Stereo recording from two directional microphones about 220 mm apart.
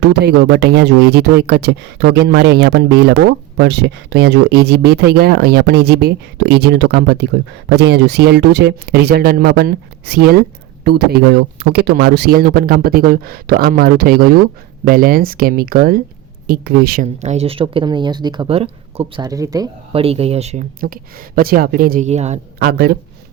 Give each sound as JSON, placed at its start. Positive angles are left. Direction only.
{"t": 0.0, "sound": "speech", "side_deg": -50}
{"t": 22.5, "sound": "speech", "side_deg": -45}